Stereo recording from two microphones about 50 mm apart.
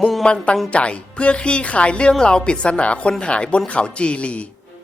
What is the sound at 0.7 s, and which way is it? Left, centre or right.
Speech, left.